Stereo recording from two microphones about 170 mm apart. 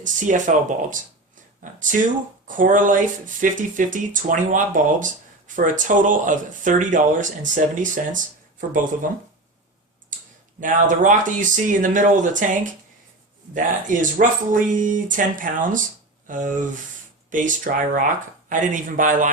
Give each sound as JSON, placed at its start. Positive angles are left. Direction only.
{"t": 0.0, "sound": "speech", "side_deg": -50}
{"t": 10.6, "sound": "speech", "side_deg": -50}